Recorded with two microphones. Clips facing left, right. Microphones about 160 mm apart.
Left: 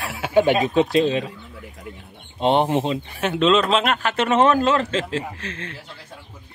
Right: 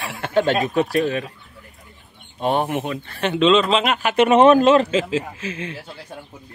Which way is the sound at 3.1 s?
5° left (ahead or behind).